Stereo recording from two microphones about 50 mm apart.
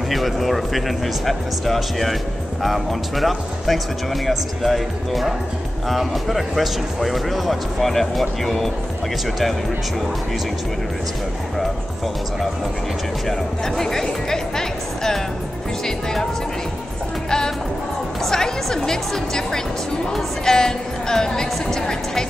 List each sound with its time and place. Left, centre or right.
0.1 s speech: centre
13.3 s speech: centre
18.2 s speech: centre